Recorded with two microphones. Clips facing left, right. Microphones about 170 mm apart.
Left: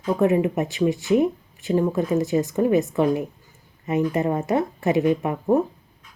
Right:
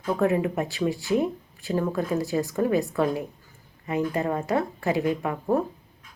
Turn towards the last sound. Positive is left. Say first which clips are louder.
# left 4 dB
turn(degrees=20)  # may be behind; listen again after turning